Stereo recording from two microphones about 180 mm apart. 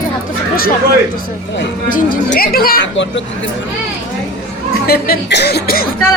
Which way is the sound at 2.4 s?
55° left (ahead or behind).